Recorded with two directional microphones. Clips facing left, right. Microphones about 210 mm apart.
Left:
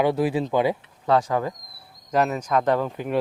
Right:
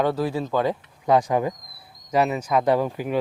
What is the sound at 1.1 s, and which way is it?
Speech, 15° right (ahead or behind).